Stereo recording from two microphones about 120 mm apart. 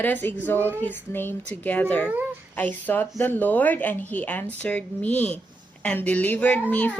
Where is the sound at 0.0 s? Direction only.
15° left (ahead or behind).